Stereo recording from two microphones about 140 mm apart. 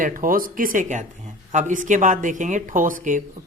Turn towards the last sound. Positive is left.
turn(degrees=-70)  # may be behind; listen again after turning